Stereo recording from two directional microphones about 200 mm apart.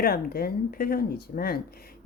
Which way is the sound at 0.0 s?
50° left (ahead or behind).